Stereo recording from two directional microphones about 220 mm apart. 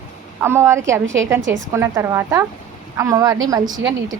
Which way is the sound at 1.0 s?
60° right (ahead or behind).